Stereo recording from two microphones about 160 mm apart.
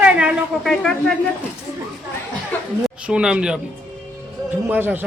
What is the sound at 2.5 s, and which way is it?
Chuckle, 10° left (ahead or behind).